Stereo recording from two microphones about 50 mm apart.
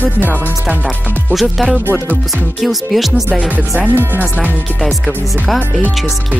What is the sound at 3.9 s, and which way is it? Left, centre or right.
Speech, right.